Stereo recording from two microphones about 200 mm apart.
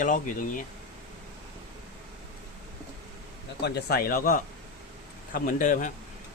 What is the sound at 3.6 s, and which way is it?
Speech, 55° left (ahead or behind).